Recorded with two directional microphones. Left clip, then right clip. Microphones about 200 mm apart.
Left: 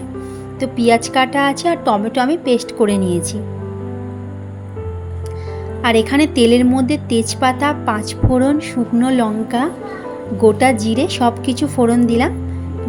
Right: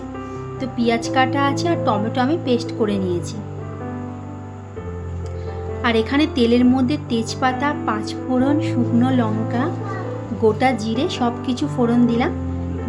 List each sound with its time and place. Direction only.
0.6 s a woman's voice: 20° left (ahead or behind)
5.8 s a woman's voice: 20° left (ahead or behind)